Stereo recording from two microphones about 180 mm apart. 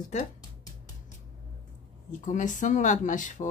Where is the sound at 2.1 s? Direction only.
45° left (ahead or behind).